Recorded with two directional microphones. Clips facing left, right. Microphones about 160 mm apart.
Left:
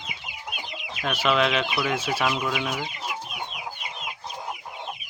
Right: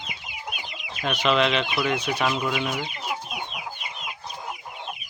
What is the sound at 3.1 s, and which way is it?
Chicken, 50° right (ahead or behind).